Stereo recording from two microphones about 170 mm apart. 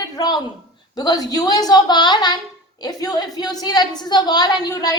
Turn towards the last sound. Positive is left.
turn(degrees=20)  # may be behind; listen again after turning